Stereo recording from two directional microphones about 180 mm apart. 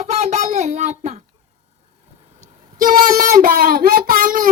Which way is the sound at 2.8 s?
50° right (ahead or behind).